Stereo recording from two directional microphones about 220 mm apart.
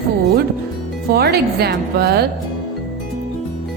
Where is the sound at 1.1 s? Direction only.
45° right (ahead or behind).